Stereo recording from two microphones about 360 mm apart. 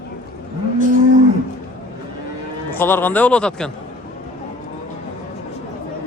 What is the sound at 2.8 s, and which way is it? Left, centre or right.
Speech, centre.